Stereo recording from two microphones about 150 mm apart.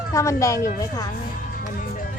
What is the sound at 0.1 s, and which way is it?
Speech, 20° left (ahead or behind).